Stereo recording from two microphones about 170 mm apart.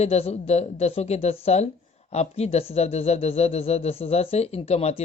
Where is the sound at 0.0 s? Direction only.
40° left (ahead or behind).